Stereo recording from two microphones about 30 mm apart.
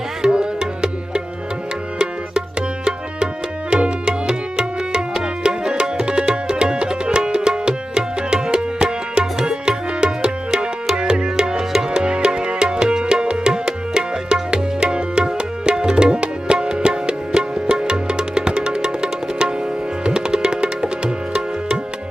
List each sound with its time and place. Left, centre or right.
0.2 s music: right
2.0 s tabla: right
3.7 s music: right
8.5 s tabla: right
9.2 s music: right